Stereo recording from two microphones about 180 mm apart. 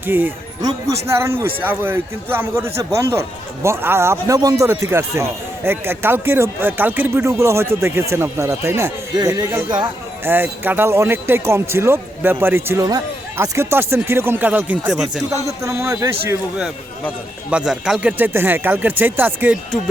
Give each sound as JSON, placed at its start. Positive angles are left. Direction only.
{"t": 0.0, "sound": "a man's voice", "side_deg": -10}
{"t": 15.3, "sound": "a man's voice", "side_deg": -15}
{"t": 17.5, "sound": "a man's voice", "side_deg": -5}